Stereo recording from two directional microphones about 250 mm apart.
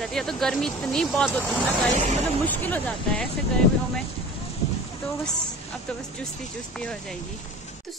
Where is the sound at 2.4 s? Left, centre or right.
Centre.